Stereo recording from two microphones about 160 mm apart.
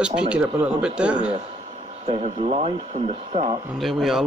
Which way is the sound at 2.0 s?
45° right (ahead or behind).